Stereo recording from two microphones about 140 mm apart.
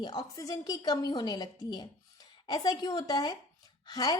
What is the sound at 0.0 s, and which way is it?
A woman's voice, 25° left (ahead or behind).